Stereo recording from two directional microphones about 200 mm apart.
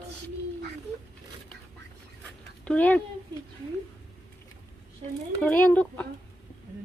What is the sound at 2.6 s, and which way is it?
Speech, 5° left (ahead or behind).